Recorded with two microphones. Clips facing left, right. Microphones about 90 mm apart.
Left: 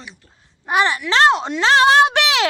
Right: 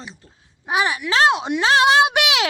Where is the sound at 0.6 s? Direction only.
5° right (ahead or behind).